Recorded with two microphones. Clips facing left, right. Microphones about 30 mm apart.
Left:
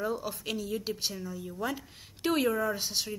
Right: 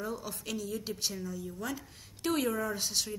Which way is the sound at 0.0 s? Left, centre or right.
Centre.